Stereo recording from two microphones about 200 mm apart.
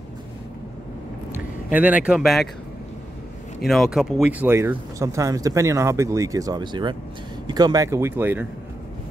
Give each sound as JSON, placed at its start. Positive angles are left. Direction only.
{"t": 1.3, "sound": "speech", "side_deg": -10}
{"t": 3.6, "sound": "speech", "side_deg": 0}